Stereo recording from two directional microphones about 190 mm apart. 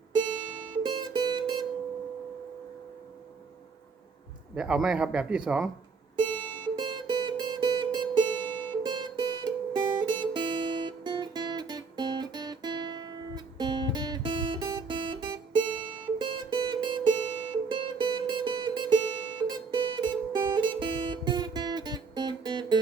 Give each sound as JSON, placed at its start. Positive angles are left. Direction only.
{"t": 0.7, "sound": "music", "side_deg": -25}
{"t": 4.5, "sound": "speech", "side_deg": -5}
{"t": 6.4, "sound": "music", "side_deg": 10}
{"t": 6.7, "sound": "music", "side_deg": -25}
{"t": 8.3, "sound": "music", "side_deg": 10}
{"t": 8.8, "sound": "music", "side_deg": -25}